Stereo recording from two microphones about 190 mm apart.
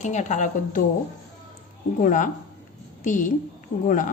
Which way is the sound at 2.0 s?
40° left (ahead or behind).